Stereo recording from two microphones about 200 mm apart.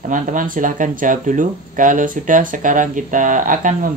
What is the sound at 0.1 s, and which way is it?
Speech, 40° right (ahead or behind).